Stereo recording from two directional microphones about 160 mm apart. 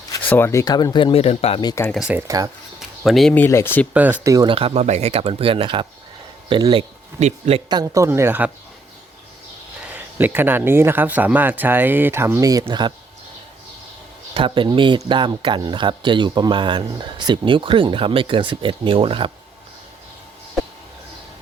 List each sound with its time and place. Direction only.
0.2 s speech: 10° left (ahead or behind); by 1.6 s 40° left (ahead or behind)
1.6 s speech: 20° left (ahead or behind)
1.9 s speech: 5° right (ahead or behind)
2.2 s speech: 20° right (ahead or behind)
3.0 s speech: centre (ahead or behind)
4.2 s speech: 20° right (ahead or behind)
4.4 s speech: 35° right (ahead or behind)
7.2 s speech: 45° right (ahead or behind)
7.7 s speech: 25° right (ahead or behind)
9.8 s speech: 10° right (ahead or behind); by 12.9 s 30° right (ahead or behind)
14.3 s speech: 30° right (ahead or behind)